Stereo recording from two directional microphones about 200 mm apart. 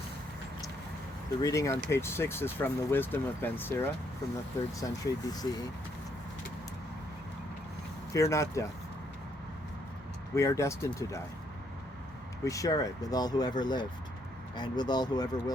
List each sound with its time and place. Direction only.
1.4 s speech: 15° left (ahead or behind)
8.1 s speech: 15° left (ahead or behind)
10.3 s speech: 15° left (ahead or behind)
12.5 s speech: 15° left (ahead or behind)